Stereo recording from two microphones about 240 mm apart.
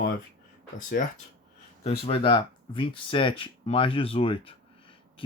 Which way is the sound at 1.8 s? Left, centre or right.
Left.